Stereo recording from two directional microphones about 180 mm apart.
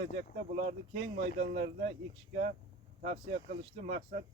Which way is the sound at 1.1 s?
50° right (ahead or behind).